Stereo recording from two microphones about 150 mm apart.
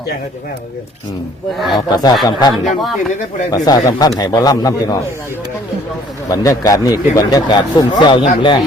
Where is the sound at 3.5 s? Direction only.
25° left (ahead or behind).